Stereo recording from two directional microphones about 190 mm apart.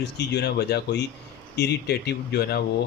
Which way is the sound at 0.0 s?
60° left (ahead or behind).